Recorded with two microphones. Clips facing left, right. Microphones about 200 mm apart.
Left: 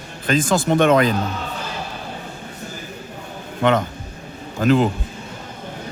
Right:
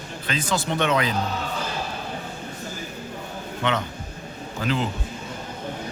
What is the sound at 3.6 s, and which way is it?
A man's voice, 45° left (ahead or behind).